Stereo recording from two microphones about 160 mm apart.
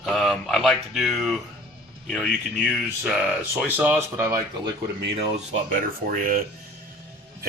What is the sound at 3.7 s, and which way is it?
Speech, 10° right (ahead or behind).